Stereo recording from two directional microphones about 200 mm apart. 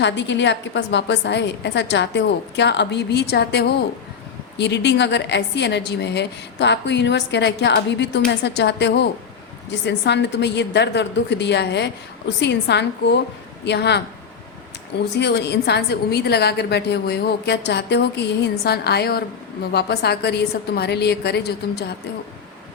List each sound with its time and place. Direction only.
0.0 s a woman's voice: 65° left (ahead or behind)
15.1 s a woman's voice: 55° left (ahead or behind)